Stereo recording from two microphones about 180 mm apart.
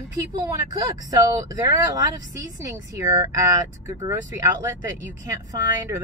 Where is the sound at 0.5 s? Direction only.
20° right (ahead or behind).